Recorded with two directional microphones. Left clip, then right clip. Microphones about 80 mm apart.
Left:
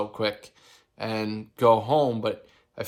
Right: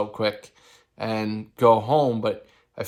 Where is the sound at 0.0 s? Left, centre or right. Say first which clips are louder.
Right 3 dB; left.